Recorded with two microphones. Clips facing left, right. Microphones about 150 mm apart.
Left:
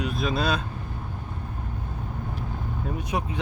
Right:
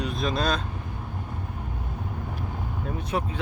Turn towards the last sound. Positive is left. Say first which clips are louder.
# even
turn(degrees=15)  # may be behind; listen again after turning